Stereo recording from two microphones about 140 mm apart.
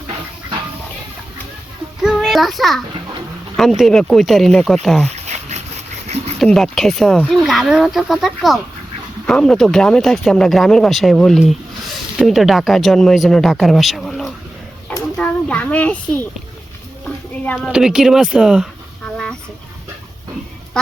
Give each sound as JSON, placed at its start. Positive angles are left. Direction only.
{"t": 2.0, "sound": "child singing", "side_deg": 0}
{"t": 3.6, "sound": "speech", "side_deg": 0}
{"t": 5.2, "sound": "dog", "side_deg": -55}
{"t": 6.4, "sound": "speech", "side_deg": 0}
{"t": 15.2, "sound": "a sound", "side_deg": 10}
{"t": 17.4, "sound": "speech", "side_deg": 10}
{"t": 17.7, "sound": "speech", "side_deg": -5}
{"t": 19.0, "sound": "chicken", "side_deg": 5}